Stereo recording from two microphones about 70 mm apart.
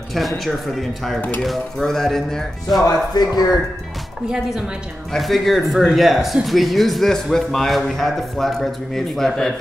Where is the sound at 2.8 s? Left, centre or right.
Left.